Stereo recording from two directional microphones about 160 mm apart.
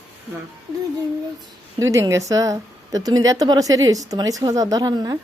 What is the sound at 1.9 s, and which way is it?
A woman's voice, 20° right (ahead or behind).